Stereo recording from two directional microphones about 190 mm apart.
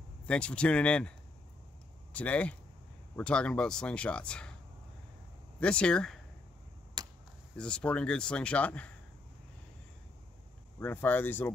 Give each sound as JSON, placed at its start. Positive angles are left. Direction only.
{"t": 0.3, "sound": "speech", "side_deg": 5}
{"t": 2.1, "sound": "speech", "side_deg": 5}
{"t": 5.6, "sound": "speech", "side_deg": 5}
{"t": 7.0, "sound": "a sound", "side_deg": -20}
{"t": 7.5, "sound": "speech", "side_deg": 5}
{"t": 10.8, "sound": "speech", "side_deg": 10}